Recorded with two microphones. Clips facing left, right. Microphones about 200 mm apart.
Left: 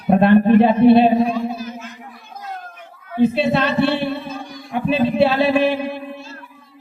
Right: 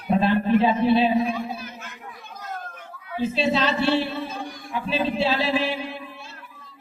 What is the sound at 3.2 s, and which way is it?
A man's voice, 60° left (ahead or behind).